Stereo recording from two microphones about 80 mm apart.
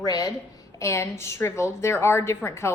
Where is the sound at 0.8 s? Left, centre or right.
Left.